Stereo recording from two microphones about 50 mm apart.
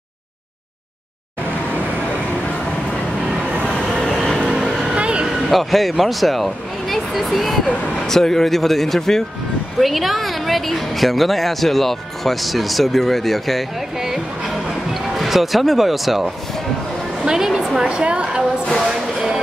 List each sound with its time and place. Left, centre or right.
3.7 s train: centre
4.1 s vehicle: centre
4.4 s vehicle: centre
4.9 s vehicle: right
5.5 s a woman's voice: centre; by 18.4 s right
18.8 s a woman's voice: centre